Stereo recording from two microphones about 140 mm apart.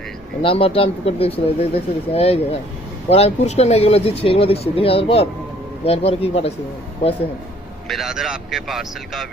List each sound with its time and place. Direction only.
0.4 s speech: 40° left (ahead or behind)
7.9 s speech: centre (ahead or behind)